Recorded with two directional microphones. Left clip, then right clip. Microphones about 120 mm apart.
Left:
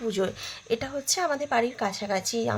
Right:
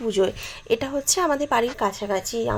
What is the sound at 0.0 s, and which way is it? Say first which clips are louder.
Speech: right 6 dB; 25° right (ahead or behind).